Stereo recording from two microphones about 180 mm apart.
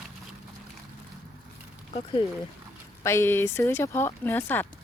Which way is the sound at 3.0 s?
15° left (ahead or behind).